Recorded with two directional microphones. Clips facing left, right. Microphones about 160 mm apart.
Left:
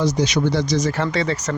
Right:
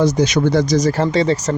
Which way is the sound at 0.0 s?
50° right (ahead or behind).